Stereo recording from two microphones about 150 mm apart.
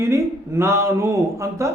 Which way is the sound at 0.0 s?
15° right (ahead or behind).